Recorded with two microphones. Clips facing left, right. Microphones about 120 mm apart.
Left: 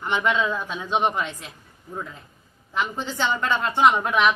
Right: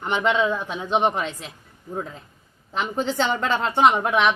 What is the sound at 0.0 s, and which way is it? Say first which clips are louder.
Speech: right 2 dB; 25° right (ahead or behind).